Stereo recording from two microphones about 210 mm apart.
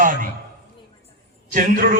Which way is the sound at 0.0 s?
40° right (ahead or behind).